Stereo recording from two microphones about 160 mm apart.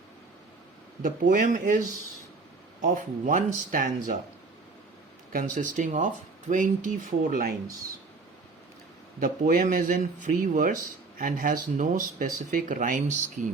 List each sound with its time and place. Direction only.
1.0 s speech: 55° right (ahead or behind)
2.9 s speech: 55° right (ahead or behind)
5.3 s speech: 55° right (ahead or behind)
9.2 s speech: 60° right (ahead or behind)